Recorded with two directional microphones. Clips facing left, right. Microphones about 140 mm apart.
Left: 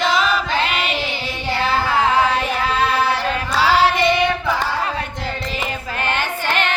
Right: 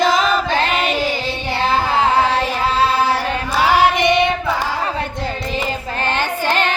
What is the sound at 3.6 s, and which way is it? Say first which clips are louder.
Singing: right 2 dB; 15° right (ahead or behind).